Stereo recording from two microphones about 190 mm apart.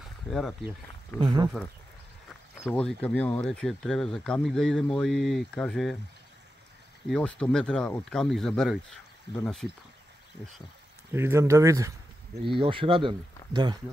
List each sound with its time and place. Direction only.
0.3 s speech: centre (ahead or behind)
1.2 s speech: 20° right (ahead or behind)
2.6 s speech: 5° left (ahead or behind)
7.1 s speech: 5° left (ahead or behind)
11.1 s speech: 15° right (ahead or behind)
12.4 s speech: 25° right (ahead or behind)